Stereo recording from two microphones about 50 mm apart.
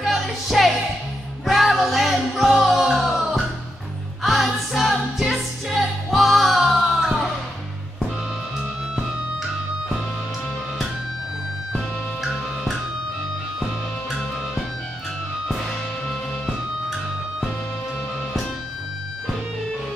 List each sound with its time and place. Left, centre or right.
0.0 s music: centre
11.7 s music: centre